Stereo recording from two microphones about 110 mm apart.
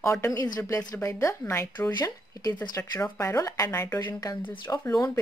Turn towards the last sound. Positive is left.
turn(degrees=30)  # may be behind; listen again after turning